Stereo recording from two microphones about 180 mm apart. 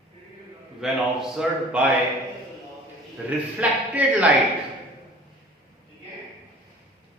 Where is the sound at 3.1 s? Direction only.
10° right (ahead or behind).